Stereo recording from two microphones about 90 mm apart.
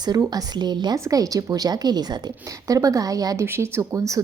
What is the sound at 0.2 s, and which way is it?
Speech, 45° right (ahead or behind).